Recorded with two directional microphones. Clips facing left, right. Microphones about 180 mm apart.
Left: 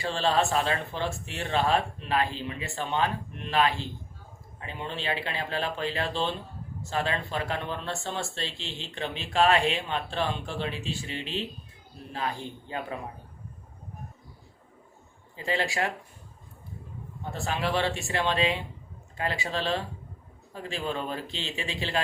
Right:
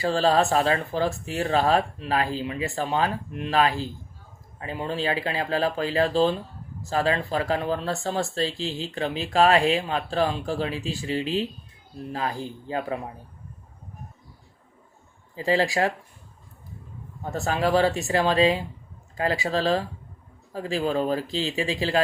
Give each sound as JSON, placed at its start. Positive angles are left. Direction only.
{"t": 0.0, "sound": "speech", "side_deg": -40}
{"t": 15.4, "sound": "speech", "side_deg": -35}
{"t": 17.3, "sound": "speech", "side_deg": -40}